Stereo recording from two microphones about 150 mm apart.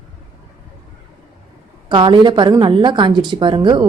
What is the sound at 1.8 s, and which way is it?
A woman's voice, 30° right (ahead or behind).